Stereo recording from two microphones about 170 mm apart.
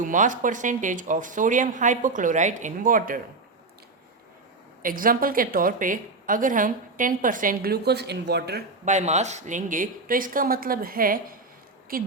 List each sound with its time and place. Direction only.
0.0 s speech: 50° right (ahead or behind)
4.8 s a woman's voice: 55° right (ahead or behind); by 8.6 s 75° right (ahead or behind)
8.8 s a woman's voice: 45° right (ahead or behind)